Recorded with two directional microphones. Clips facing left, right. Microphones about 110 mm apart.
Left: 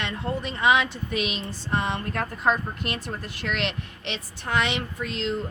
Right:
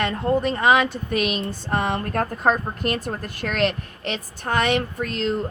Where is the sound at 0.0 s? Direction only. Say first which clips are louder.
Right 8 dB; 45° right (ahead or behind).